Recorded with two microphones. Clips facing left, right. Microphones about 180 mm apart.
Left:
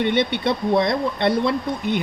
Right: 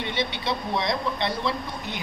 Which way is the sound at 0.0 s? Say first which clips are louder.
Left 9 dB; 60° left (ahead or behind).